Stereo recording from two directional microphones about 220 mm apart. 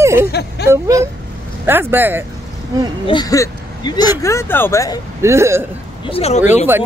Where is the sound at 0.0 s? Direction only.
10° right (ahead or behind).